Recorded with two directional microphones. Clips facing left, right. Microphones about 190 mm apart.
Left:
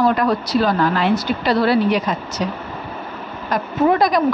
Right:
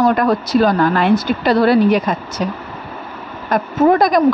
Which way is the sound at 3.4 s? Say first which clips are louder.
Right 4 dB; 50° right (ahead or behind).